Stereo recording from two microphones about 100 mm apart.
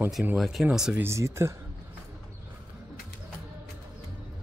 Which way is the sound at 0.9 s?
25° right (ahead or behind).